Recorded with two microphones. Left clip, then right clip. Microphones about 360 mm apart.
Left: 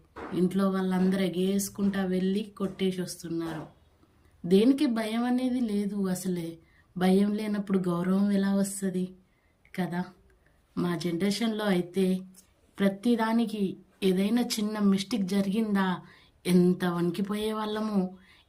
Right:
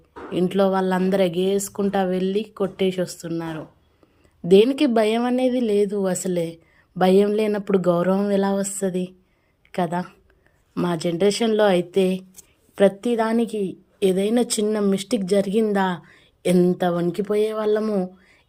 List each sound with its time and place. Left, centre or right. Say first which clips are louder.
0.7 s a woman's voice: right 9 dB; centre